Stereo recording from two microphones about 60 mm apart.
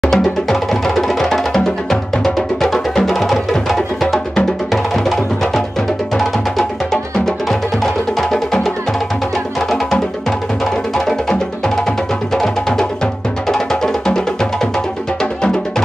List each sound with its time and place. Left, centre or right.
0.0 s music: centre
6.9 s music: centre